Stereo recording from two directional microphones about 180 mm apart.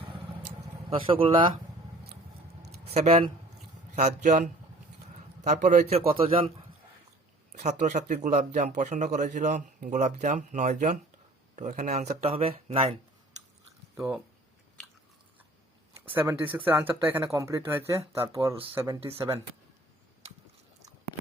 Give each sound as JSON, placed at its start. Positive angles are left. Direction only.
{"t": 0.0, "sound": "vehicle", "side_deg": -30}
{"t": 0.9, "sound": "a man's voice", "side_deg": -30}
{"t": 2.6, "sound": "a sound", "side_deg": -35}
{"t": 3.9, "sound": "speech", "side_deg": -40}
{"t": 7.5, "sound": "speech", "side_deg": -40}
{"t": 13.9, "sound": "speech", "side_deg": -15}
{"t": 16.0, "sound": "speech", "side_deg": -10}